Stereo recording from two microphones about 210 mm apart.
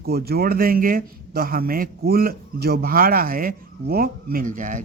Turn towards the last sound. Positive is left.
turn(degrees=-40)  # may be behind; listen again after turning